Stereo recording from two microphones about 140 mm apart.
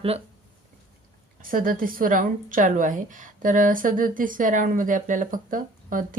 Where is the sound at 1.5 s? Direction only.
85° right.